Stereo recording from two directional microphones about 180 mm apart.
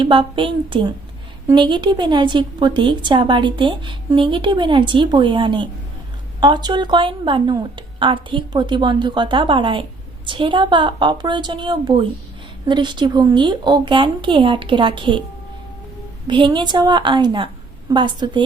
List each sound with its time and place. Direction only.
0.0 s a woman's voice: 30° right (ahead or behind)
16.2 s a woman's voice: 25° right (ahead or behind)